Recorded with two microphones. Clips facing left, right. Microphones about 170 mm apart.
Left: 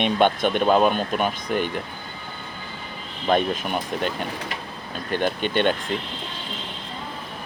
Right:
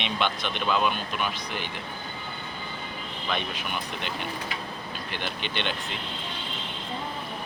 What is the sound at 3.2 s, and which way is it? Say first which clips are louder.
Speech: left 11 dB; 45° left (ahead or behind).